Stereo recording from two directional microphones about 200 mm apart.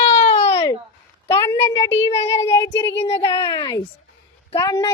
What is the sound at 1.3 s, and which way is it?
Speech, 20° left (ahead or behind).